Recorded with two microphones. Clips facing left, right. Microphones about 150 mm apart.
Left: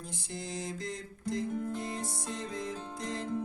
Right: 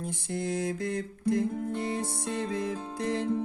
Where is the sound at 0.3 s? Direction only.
60° right (ahead or behind).